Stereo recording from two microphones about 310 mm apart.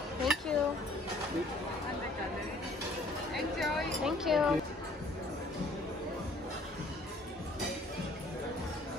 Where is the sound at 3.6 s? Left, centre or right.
Centre.